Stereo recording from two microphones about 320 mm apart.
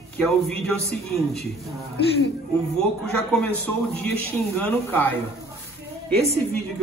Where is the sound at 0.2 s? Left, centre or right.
Centre.